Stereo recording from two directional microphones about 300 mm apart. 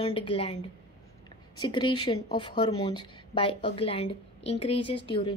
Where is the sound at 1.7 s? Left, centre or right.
Centre.